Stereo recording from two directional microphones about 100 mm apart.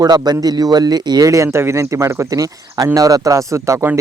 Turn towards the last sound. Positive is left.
turn(degrees=-30)  # may be behind; listen again after turning